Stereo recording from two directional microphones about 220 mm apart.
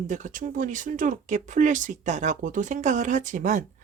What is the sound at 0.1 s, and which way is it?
Speech, 35° right (ahead or behind).